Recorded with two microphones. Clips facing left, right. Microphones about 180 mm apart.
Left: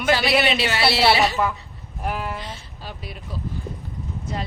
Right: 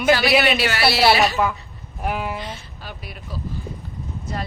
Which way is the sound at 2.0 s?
5° right (ahead or behind).